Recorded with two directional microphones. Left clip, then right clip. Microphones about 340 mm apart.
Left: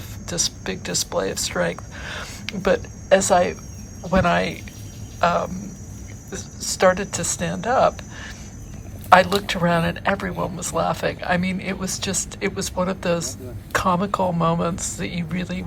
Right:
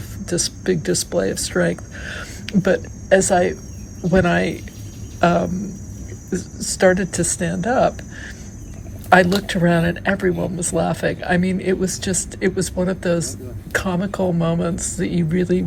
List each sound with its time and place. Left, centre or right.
0.3 s a woman's voice: centre
14.5 s speech: left
14.8 s speech: centre